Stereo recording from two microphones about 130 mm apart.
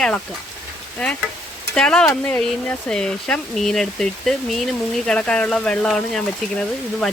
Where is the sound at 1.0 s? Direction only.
5° left (ahead or behind).